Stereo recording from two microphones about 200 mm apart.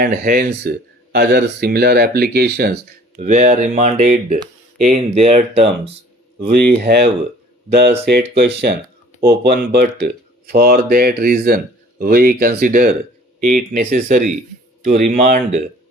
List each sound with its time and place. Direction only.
0.0 s speech: 50° right (ahead or behind)
3.2 s speech: 40° right (ahead or behind)
6.5 s speech: 50° right (ahead or behind)